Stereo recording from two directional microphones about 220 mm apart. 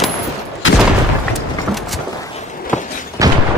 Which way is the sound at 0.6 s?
60° left (ahead or behind).